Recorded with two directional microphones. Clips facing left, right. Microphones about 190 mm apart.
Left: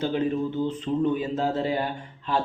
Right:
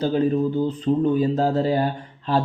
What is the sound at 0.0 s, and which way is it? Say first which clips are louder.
Speech: right 5 dB; 35° right (ahead or behind).